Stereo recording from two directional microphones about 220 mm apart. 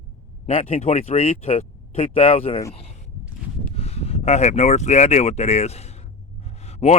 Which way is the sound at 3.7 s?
30° left (ahead or behind).